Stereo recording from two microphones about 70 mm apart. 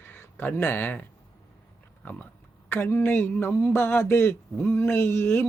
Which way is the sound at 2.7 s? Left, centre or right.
Left.